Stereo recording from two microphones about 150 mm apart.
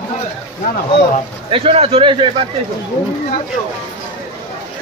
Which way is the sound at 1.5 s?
40° right (ahead or behind).